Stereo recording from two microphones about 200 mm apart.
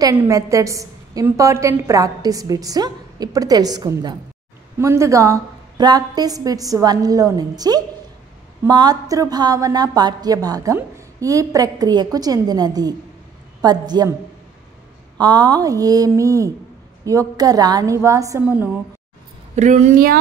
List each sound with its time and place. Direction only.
0.0 s a woman's voice: 15° right (ahead or behind)
15.1 s a woman's voice: 20° right (ahead or behind)
19.5 s speech: 35° right (ahead or behind)